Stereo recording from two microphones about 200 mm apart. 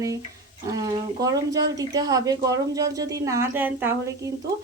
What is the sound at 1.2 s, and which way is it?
A woman's voice, 15° right (ahead or behind).